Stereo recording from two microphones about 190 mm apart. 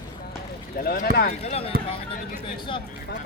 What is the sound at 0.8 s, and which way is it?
Speech, 50° left (ahead or behind).